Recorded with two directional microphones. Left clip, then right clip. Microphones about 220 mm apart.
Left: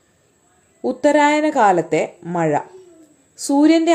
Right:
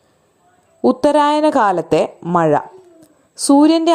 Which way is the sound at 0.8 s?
30° right (ahead or behind).